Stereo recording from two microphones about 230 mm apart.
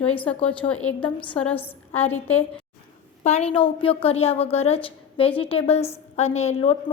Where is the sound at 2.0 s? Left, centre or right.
Centre.